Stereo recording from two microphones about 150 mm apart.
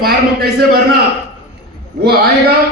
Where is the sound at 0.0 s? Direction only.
90° right.